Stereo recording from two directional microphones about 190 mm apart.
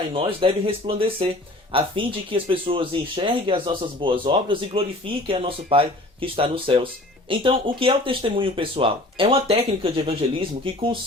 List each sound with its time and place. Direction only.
0.1 s speech: 30° right (ahead or behind)